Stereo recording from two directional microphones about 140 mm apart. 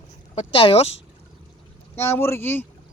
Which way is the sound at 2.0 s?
15° left (ahead or behind).